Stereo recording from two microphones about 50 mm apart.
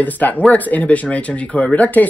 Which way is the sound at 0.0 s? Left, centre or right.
Left.